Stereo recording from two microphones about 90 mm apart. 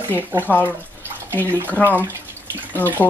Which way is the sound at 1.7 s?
20° left (ahead or behind).